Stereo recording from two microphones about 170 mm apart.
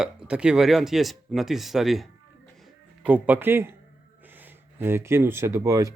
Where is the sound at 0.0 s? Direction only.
5° right (ahead or behind).